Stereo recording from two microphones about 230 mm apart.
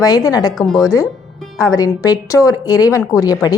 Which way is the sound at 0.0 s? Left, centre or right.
Centre.